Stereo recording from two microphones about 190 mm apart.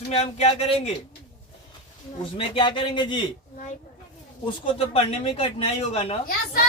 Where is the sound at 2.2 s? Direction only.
25° left (ahead or behind).